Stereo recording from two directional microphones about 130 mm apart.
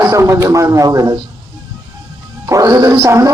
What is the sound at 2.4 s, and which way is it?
Speech, 25° right (ahead or behind).